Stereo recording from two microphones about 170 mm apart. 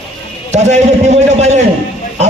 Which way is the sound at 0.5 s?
40° right (ahead or behind).